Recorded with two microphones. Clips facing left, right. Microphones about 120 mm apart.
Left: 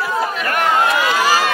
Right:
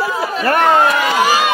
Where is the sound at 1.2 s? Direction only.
15° right (ahead or behind).